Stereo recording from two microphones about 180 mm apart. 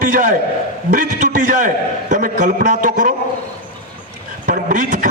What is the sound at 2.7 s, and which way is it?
Speech, 45° right (ahead or behind).